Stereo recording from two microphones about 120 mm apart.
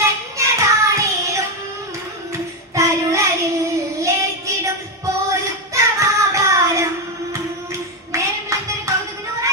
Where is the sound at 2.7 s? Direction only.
25° right (ahead or behind).